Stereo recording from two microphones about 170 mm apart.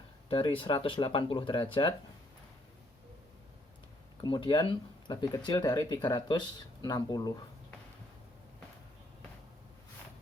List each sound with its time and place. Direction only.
0.3 s speech: 30° left (ahead or behind)
4.2 s speech: 30° left (ahead or behind)